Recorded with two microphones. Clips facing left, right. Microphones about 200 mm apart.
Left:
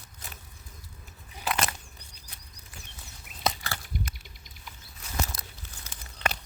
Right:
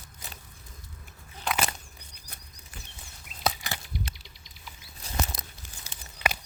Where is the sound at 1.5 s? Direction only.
5° left (ahead or behind).